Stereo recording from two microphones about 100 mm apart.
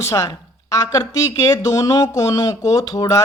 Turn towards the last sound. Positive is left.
turn(degrees=40)  # may be behind; listen again after turning